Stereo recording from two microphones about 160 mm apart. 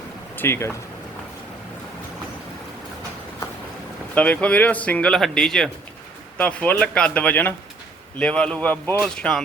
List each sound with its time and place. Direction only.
0.3 s speech: 15° left (ahead or behind)
4.1 s speech: 10° left (ahead or behind)